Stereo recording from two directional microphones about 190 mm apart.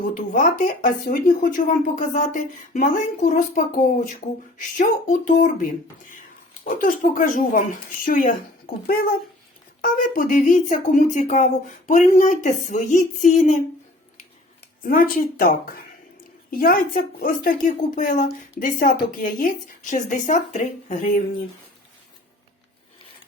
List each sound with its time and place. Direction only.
0.1 s a woman's voice: 45° left (ahead or behind)
14.8 s a woman's voice: 50° left (ahead or behind)